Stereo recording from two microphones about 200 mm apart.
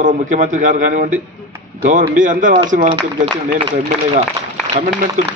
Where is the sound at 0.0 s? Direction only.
40° right (ahead or behind).